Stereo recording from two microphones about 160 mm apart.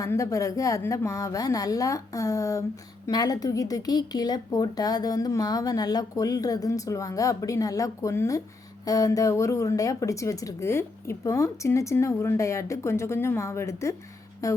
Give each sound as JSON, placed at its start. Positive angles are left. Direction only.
{"t": 0.0, "sound": "a woman's voice", "side_deg": 20}